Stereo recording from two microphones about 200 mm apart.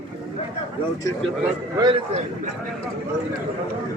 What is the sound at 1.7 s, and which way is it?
Speech, 25° right (ahead or behind).